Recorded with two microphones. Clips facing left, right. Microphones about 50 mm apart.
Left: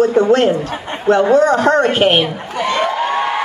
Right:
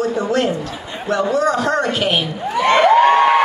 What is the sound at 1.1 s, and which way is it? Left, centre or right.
A man's voice, left.